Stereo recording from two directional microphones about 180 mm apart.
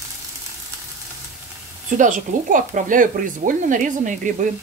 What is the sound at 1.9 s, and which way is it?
Speech, 45° right (ahead or behind).